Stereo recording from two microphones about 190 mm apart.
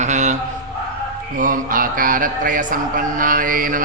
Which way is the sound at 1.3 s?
45° right (ahead or behind).